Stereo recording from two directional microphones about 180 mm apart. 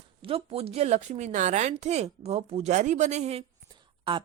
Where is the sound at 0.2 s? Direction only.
30° right (ahead or behind).